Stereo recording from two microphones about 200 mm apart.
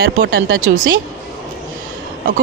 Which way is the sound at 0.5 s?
45° right (ahead or behind).